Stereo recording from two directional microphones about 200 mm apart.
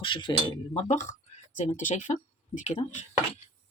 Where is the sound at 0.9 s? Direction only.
35° left (ahead or behind).